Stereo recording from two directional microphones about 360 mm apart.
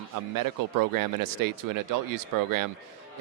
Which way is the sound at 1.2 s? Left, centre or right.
Right.